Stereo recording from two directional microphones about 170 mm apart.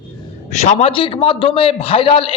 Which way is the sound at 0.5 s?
40° left (ahead or behind).